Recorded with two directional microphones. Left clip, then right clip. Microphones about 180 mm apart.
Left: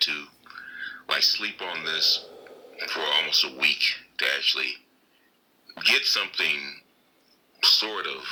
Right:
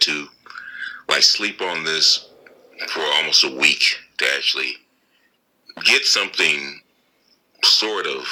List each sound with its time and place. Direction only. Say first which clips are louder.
0.0 s whispering: right 7 dB; 35° right (ahead or behind)
2.7 s speech: right 5 dB; 35° right (ahead or behind)